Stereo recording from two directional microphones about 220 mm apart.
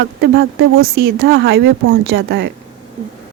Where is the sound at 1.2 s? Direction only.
60° right (ahead or behind); by 2.5 s 45° right (ahead or behind).